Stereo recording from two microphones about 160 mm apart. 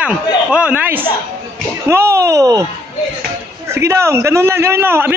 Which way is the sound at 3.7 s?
15° right (ahead or behind).